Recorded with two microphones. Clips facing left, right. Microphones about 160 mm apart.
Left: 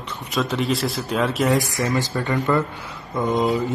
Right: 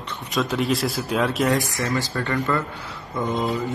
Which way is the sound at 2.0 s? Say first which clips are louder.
Left 2 dB; 20° left (ahead or behind).